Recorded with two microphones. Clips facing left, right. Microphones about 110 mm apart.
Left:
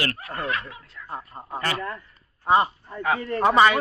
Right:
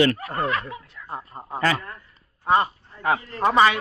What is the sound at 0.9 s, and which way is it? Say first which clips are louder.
Speech: right 1 dB; 10° right (ahead or behind).